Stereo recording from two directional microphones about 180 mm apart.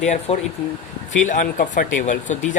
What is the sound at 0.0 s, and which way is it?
Speech, 40° left (ahead or behind).